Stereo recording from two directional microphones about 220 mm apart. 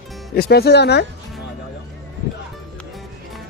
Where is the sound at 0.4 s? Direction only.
45° left (ahead or behind).